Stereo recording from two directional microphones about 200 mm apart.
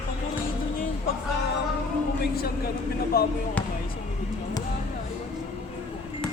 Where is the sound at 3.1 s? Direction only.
50° left (ahead or behind).